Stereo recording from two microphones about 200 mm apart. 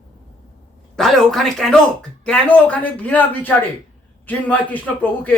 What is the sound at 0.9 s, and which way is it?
Speech, centre (ahead or behind).